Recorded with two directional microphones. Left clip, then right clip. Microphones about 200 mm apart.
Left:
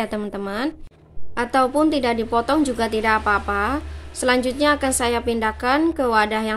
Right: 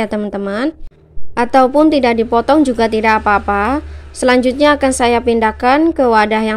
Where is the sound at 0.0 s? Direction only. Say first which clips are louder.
Right 7 dB; 35° right (ahead or behind).